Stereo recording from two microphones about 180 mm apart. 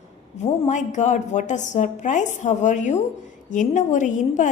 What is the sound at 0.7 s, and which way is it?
A woman's voice, 40° left (ahead or behind).